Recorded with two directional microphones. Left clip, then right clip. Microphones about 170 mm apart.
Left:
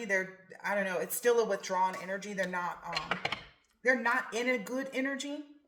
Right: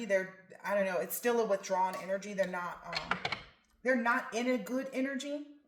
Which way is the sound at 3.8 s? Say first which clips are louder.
Left 2 dB; 35° left (ahead or behind).